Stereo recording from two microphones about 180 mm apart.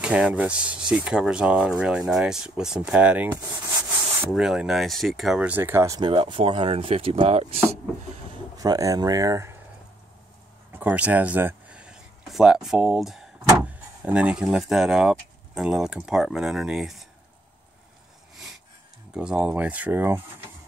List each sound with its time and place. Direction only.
0.0 s speech: 5° right (ahead or behind); by 7.6 s 35° right (ahead or behind)
8.5 s speech: 20° right (ahead or behind)
10.7 s a sound: 10° right (ahead or behind)
13.7 s speech: 5° right (ahead or behind)
19.1 s speech: 5° right (ahead or behind)